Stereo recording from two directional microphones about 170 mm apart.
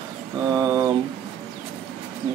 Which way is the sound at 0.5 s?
20° right (ahead or behind).